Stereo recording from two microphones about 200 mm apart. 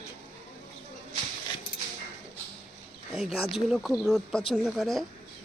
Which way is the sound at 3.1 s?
Centre (ahead or behind).